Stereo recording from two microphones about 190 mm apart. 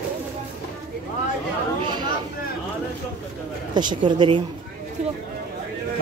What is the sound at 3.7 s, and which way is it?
Speech, 25° right (ahead or behind).